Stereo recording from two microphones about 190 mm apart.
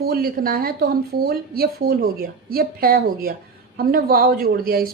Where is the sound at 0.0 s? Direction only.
55° right (ahead or behind).